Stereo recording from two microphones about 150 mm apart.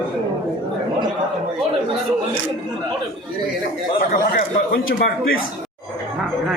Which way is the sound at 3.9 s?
75° left (ahead or behind).